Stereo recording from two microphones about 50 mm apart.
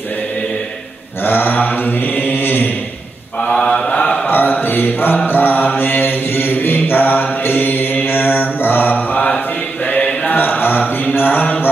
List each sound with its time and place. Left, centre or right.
1.2 s mantra: left
3.4 s mantra: centre
4.3 s mantra: left
10.3 s a sound: left